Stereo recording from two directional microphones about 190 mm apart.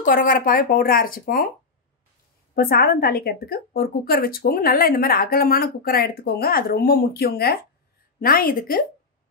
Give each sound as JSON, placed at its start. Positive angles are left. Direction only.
{"t": 0.0, "sound": "a woman's voice", "side_deg": 45}
{"t": 2.5, "sound": "a woman's voice", "side_deg": 50}